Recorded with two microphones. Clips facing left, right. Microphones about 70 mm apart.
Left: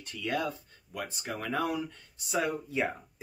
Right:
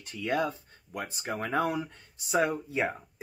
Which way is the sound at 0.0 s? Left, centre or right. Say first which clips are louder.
Right 3 dB; right.